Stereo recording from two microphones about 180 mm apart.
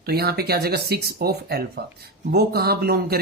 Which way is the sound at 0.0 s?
60° right (ahead or behind).